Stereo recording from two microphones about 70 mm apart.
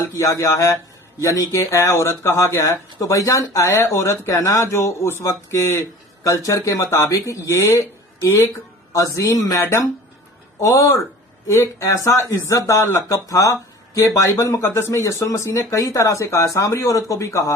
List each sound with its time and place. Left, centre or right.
0.0 s speech: left